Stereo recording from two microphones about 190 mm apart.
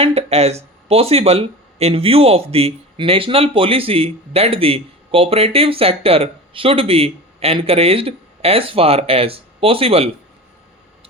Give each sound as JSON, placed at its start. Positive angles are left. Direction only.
{"t": 0.0, "sound": "speech", "side_deg": -30}